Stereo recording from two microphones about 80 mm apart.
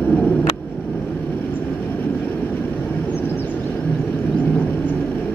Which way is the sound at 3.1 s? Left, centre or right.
Left.